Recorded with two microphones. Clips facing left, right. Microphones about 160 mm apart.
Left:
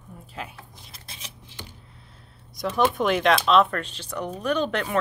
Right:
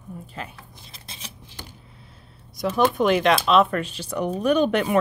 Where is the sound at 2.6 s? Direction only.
Centre (ahead or behind).